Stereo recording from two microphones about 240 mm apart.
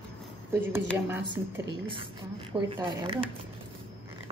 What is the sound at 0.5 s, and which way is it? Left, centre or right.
Speech, centre.